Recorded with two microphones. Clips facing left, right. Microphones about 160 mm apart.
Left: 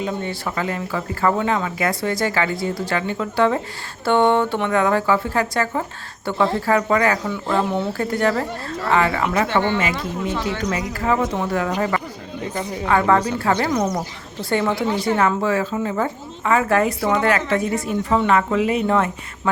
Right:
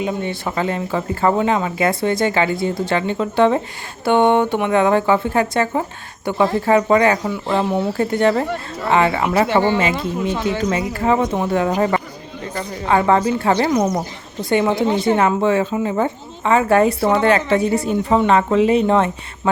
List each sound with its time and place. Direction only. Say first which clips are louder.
0.0 s speech: right 3 dB; 20° right (ahead or behind)
7.7 s speech: right 3 dB; centre (ahead or behind)
7.9 s speech: right 5 dB; 25° right (ahead or behind)